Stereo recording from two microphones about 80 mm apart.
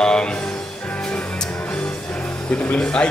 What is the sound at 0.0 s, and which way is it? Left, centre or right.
Music, centre.